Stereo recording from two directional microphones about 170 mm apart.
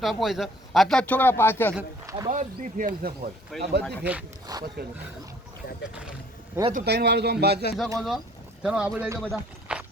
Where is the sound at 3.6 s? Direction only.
75° right (ahead or behind).